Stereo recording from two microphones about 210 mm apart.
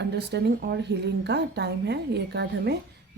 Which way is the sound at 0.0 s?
55° right (ahead or behind).